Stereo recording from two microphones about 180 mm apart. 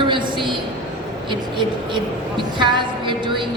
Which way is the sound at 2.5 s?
25° right (ahead or behind).